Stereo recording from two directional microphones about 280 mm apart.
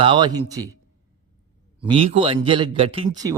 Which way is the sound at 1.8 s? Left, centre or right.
Centre.